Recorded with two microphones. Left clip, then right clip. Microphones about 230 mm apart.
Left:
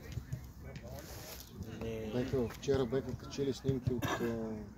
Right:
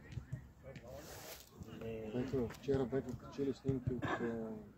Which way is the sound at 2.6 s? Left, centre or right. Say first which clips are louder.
Left 4 dB; left.